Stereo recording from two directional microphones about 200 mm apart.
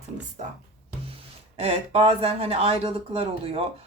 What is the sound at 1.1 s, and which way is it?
Speech, 30° right (ahead or behind).